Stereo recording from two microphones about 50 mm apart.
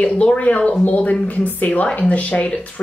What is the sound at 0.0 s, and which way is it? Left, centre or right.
A woman's voice, left.